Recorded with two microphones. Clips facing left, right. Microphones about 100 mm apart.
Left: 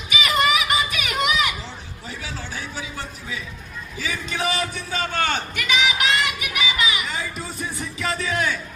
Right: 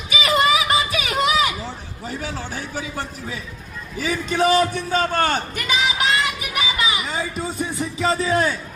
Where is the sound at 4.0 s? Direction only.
45° right (ahead or behind).